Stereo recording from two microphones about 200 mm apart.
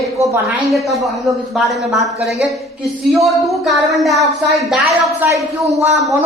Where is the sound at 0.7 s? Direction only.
Centre (ahead or behind).